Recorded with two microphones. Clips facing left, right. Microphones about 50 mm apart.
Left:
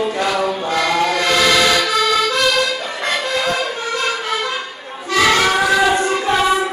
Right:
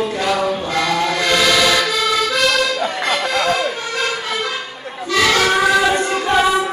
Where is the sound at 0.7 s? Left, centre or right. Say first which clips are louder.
Left 3 dB; left.